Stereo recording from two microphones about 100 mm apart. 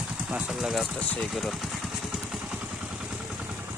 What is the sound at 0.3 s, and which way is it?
Speech, 10° right (ahead or behind).